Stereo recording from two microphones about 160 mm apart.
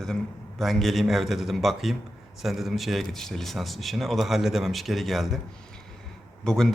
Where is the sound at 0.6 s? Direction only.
Centre (ahead or behind).